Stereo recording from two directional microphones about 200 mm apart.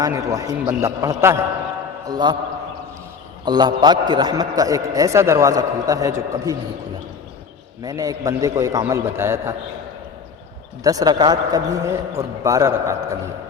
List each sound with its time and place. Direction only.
0.0 s a man's voice: 15° right (ahead or behind)
3.4 s a man's voice: 20° right (ahead or behind)
7.8 s a man's voice: 15° right (ahead or behind)
10.8 s a man's voice: 20° right (ahead or behind)